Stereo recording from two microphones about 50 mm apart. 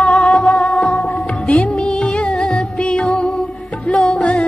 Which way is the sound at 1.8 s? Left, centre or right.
Left.